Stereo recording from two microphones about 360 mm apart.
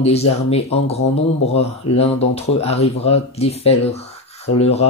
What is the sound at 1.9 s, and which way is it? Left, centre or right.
Speech, centre.